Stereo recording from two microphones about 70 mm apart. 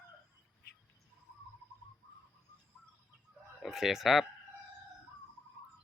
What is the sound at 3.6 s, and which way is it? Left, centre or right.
Speech, centre.